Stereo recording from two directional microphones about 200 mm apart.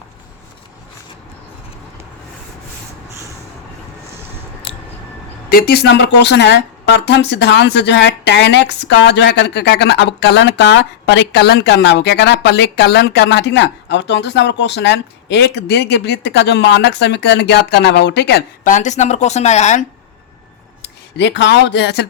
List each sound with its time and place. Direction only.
5.5 s a woman's voice: 50° left (ahead or behind)
20.8 s speech: 60° left (ahead or behind)